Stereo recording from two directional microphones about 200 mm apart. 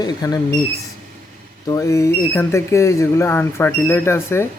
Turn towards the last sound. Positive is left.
turn(degrees=15)  # may be behind; listen again after turning